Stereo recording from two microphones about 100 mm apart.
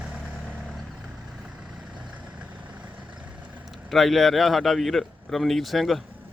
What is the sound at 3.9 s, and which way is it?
A man's voice, centre (ahead or behind).